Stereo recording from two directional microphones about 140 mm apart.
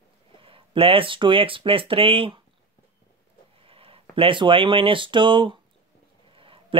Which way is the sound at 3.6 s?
40° right (ahead or behind).